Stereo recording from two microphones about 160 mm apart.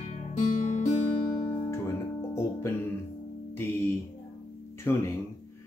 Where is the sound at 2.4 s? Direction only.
15° left (ahead or behind).